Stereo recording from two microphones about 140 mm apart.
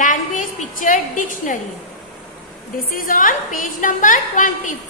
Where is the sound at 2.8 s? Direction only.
80° left.